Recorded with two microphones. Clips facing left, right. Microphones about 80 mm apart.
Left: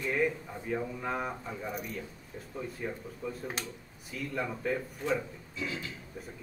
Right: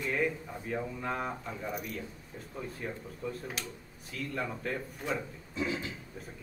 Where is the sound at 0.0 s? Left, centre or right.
Centre.